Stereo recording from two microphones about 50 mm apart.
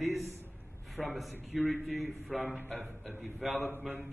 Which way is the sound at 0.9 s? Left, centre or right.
Centre.